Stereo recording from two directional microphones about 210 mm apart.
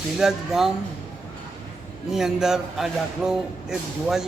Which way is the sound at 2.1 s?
Centre (ahead or behind).